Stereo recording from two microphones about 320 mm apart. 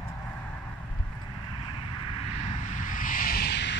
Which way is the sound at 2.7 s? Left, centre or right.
Left.